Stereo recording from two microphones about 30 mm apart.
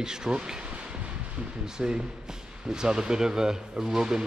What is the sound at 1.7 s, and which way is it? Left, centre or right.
Speech, right.